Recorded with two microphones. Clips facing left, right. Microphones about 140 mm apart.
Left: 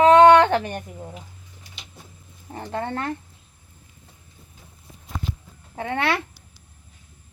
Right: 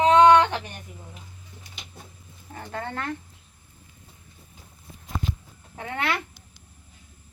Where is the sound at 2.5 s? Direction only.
30° left (ahead or behind).